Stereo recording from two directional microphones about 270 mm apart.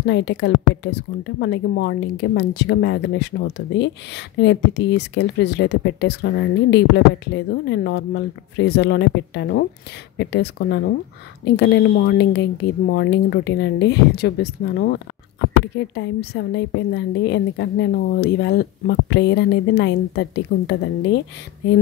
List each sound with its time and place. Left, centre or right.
0.0 s a woman's voice: left